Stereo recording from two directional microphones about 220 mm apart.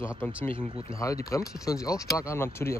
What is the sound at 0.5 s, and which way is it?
Speech, 25° right (ahead or behind).